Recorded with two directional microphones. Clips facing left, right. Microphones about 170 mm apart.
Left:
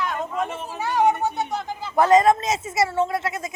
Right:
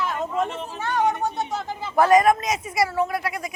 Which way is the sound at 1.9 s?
20° left (ahead or behind).